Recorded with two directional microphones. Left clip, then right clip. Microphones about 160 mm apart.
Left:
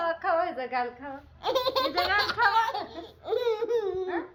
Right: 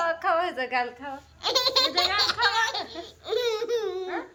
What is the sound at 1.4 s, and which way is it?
Baby laughter, 10° left (ahead or behind).